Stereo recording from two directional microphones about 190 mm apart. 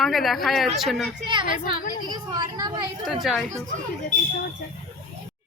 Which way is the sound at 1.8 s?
45° left (ahead or behind).